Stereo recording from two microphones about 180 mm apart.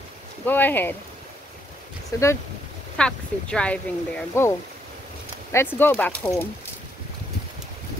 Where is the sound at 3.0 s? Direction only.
5° left (ahead or behind).